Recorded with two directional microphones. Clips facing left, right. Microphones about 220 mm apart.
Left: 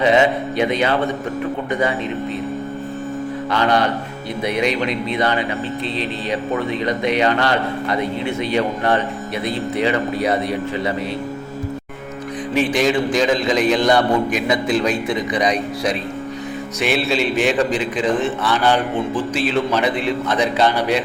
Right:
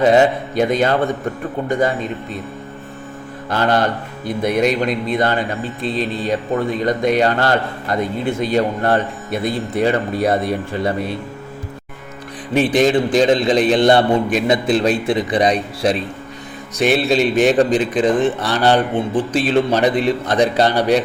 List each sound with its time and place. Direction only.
0.0 s speech: 45° right (ahead or behind)
3.5 s speech: 45° right (ahead or behind)
12.7 s a man's voice: 35° right (ahead or behind)
17.1 s a man's voice: 40° right (ahead or behind)